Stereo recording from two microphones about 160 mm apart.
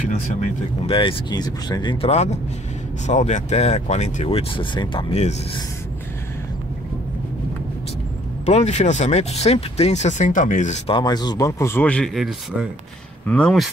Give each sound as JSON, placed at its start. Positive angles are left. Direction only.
{"t": 0.8, "sound": "speech", "side_deg": 35}
{"t": 2.0, "sound": "speech", "side_deg": 45}
{"t": 8.5, "sound": "speech", "side_deg": 45}
{"t": 10.9, "sound": "speech", "side_deg": 25}